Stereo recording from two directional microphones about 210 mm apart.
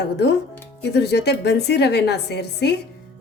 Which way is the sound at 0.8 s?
55° left (ahead or behind).